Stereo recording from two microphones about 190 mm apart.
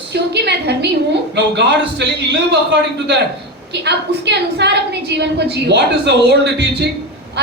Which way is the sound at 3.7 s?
65° right (ahead or behind).